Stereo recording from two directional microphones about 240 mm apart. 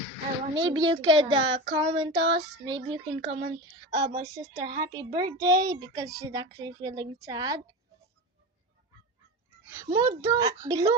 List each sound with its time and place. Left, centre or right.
0.5 s a child's voice: centre
9.6 s a child's voice: centre